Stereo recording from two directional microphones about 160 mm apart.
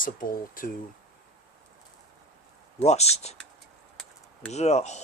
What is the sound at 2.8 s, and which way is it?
Speech, 45° left (ahead or behind).